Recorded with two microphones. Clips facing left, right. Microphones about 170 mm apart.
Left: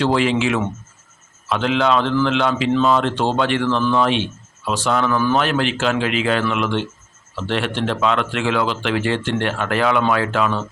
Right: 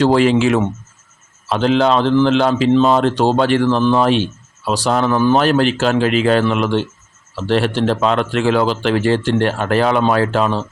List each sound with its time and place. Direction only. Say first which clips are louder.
0.0 s speech: right 5 dB; 40° right (ahead or behind)